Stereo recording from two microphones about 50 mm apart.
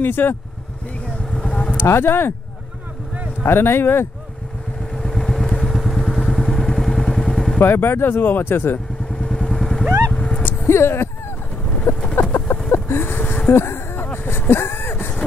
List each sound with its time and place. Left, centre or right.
0.0 s speech: left
1.3 s vehicle: centre
1.8 s speech: left
3.4 s speech: left
4.9 s vehicle: centre
7.6 s speech: left
9.3 s vehicle: centre
10.1 s vehicle: centre
10.7 s a sound: left
12.7 s a sound: left
13.5 s a sound: left